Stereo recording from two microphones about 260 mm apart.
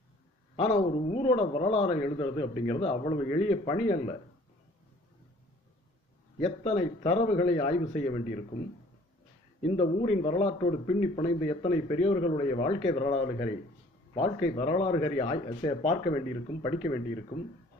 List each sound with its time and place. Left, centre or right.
0.5 s a man's voice: left
6.4 s a man's voice: left
9.6 s a man's voice: left